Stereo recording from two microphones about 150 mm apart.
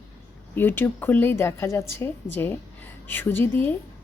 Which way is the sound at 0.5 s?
15° left (ahead or behind).